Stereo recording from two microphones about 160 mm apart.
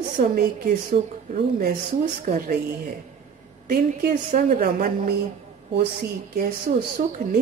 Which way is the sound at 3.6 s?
55° right (ahead or behind).